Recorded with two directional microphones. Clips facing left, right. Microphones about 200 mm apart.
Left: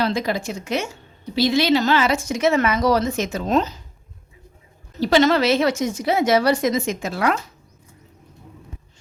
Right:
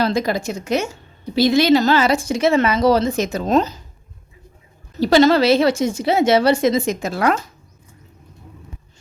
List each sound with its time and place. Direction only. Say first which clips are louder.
0.0 s speech: right 3 dB; 40° right (ahead or behind)
4.9 s speech: right 3 dB; 40° right (ahead or behind)